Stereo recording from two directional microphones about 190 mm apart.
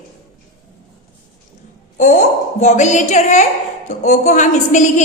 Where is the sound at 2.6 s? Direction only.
40° left (ahead or behind).